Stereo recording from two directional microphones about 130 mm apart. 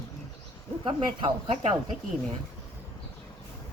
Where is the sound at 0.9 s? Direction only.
45° right (ahead or behind).